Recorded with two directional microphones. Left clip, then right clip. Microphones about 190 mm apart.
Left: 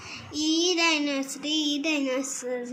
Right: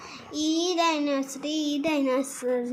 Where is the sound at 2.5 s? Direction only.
45° right (ahead or behind).